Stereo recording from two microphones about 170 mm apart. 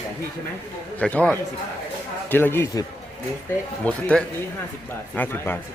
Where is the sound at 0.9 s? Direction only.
10° left (ahead or behind).